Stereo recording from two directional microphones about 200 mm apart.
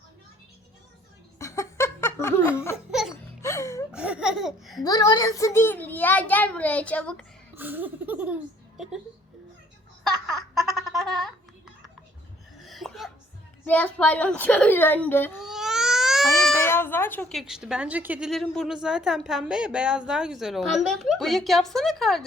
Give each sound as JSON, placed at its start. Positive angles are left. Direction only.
{"t": 1.4, "sound": "laughter", "side_deg": 15}
{"t": 2.9, "sound": "music", "side_deg": 0}
{"t": 3.4, "sound": "music", "side_deg": 15}
{"t": 3.9, "sound": "speech", "side_deg": -5}
{"t": 4.8, "sound": "a child's voice", "side_deg": 20}
{"t": 7.5, "sound": "speech", "side_deg": -10}
{"t": 10.5, "sound": "a sound", "side_deg": 0}
{"t": 12.5, "sound": "sneeze", "side_deg": 0}
{"t": 13.7, "sound": "a child's voice", "side_deg": 5}
{"t": 15.4, "sound": "baby cry", "side_deg": 0}
{"t": 16.6, "sound": "speech", "side_deg": 10}